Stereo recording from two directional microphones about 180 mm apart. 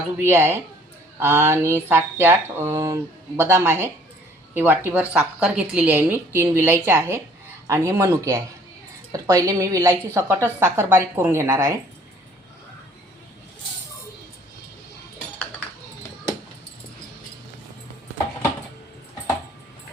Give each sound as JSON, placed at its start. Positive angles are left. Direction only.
{"t": 0.2, "sound": "a woman's voice", "side_deg": -15}